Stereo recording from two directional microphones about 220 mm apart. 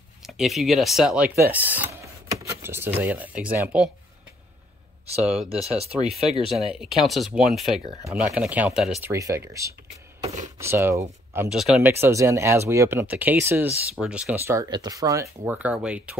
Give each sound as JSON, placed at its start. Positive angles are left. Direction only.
{"t": 0.2, "sound": "speech", "side_deg": 0}
{"t": 2.0, "sound": "a sound", "side_deg": -10}
{"t": 5.2, "sound": "speech", "side_deg": -5}
{"t": 5.8, "sound": "speech", "side_deg": -25}
{"t": 6.5, "sound": "speech", "side_deg": 0}
{"t": 9.1, "sound": "speech", "side_deg": -15}